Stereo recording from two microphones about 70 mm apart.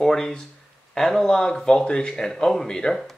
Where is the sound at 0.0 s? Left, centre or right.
Centre.